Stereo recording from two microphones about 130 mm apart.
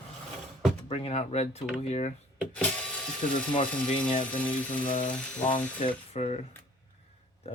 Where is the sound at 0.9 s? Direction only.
50° left (ahead or behind).